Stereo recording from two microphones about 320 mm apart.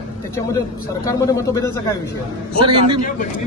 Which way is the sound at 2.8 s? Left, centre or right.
Left.